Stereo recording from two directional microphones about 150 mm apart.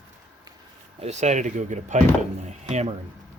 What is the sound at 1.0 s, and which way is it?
Speech, 50° right (ahead or behind).